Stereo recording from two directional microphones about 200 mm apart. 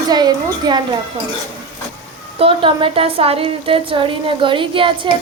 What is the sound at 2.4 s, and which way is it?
A woman's voice, 25° right (ahead or behind).